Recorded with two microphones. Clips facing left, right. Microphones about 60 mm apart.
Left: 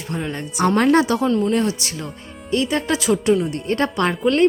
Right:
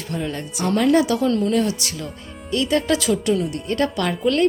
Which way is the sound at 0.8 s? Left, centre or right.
Left.